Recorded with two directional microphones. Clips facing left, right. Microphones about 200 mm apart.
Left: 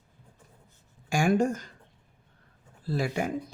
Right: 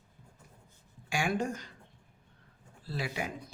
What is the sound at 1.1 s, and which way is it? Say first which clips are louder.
Speech: left 8 dB; 45° left (ahead or behind).